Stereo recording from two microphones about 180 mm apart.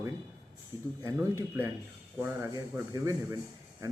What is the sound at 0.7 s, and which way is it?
Speech, 25° left (ahead or behind).